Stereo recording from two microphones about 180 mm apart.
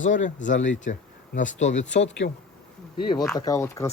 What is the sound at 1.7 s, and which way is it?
Speech, 85° left.